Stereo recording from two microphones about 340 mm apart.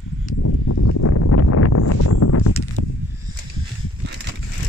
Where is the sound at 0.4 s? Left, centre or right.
Left.